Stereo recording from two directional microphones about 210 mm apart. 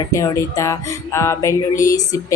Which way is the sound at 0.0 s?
15° left (ahead or behind).